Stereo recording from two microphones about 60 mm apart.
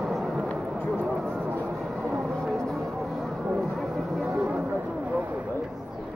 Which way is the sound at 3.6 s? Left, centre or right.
Centre.